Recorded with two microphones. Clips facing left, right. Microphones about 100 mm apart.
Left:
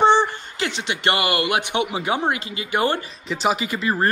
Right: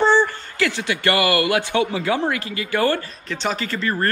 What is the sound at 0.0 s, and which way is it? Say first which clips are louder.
Speech: left 1 dB; 20° left (ahead or behind).